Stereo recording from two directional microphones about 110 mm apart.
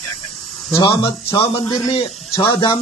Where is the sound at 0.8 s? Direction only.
50° left (ahead or behind).